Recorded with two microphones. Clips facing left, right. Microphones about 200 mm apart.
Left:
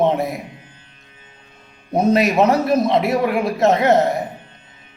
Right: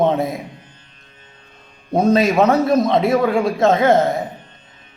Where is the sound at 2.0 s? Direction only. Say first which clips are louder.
Right 1 dB; 20° left (ahead or behind).